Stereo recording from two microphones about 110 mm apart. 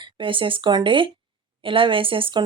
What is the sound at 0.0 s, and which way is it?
Speech, 50° right (ahead or behind).